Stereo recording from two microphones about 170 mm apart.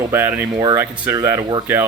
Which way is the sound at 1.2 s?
20° right (ahead or behind).